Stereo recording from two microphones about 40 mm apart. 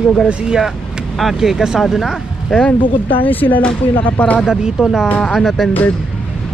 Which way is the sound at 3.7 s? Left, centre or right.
Left.